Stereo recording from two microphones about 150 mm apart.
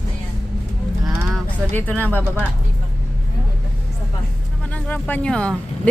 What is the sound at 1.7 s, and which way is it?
Speech, 10° left (ahead or behind).